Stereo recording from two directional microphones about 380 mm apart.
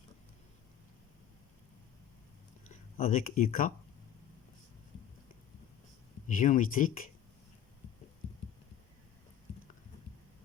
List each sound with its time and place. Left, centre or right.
2.6 s speech: centre
6.2 s speech: left